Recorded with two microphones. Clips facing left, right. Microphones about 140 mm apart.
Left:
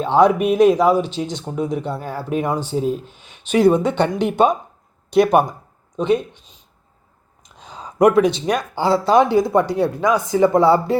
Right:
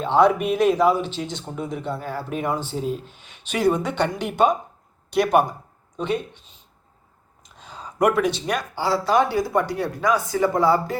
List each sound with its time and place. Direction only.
0.0 s speech: 15° left (ahead or behind)
7.6 s speech: 20° left (ahead or behind)